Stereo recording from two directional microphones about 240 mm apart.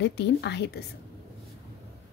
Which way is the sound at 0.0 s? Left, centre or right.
Left.